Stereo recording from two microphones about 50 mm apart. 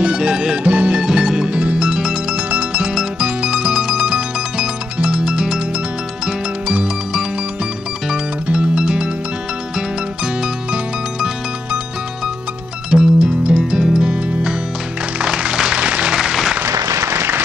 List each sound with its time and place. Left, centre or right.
0.0 s music: centre
1.8 s music: centre
8.1 s music: centre
12.9 s music: right
16.2 s applause: centre
16.6 s applause: right